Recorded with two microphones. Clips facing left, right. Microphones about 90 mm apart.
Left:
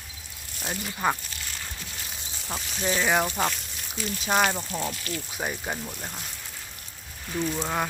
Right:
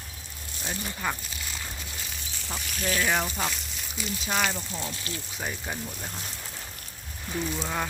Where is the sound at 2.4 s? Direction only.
10° left (ahead or behind).